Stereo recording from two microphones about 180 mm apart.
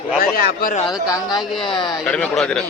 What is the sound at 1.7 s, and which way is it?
Speech, 25° left (ahead or behind).